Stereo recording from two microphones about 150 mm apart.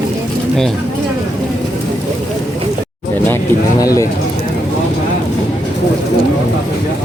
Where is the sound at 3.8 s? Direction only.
20° left (ahead or behind).